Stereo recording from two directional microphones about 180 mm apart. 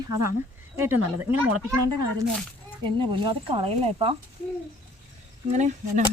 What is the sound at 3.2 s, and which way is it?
Speech, 30° right (ahead or behind).